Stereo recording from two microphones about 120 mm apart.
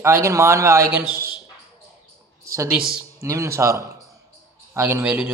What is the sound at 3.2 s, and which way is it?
A man's voice, 25° right (ahead or behind).